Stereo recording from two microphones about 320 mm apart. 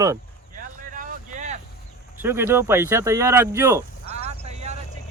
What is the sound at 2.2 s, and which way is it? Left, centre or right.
Speech, centre.